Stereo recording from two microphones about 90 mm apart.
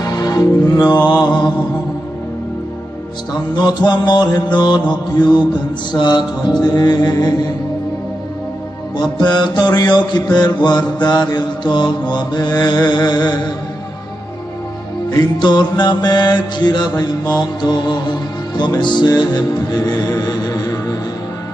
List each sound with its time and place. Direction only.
0.0 s music: 45° left (ahead or behind)
1.0 s mantra: 50° left (ahead or behind)
3.8 s music: 55° left (ahead or behind)
8.9 s music: 55° left (ahead or behind)
15.0 s music: 50° left (ahead or behind)